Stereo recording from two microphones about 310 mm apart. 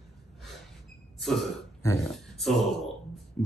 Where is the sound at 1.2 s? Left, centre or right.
Centre.